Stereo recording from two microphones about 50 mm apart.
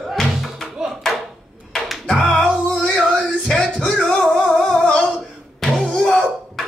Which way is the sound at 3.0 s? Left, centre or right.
Centre.